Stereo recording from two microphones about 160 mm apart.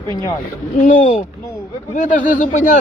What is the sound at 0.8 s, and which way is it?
Speech, 50° left (ahead or behind).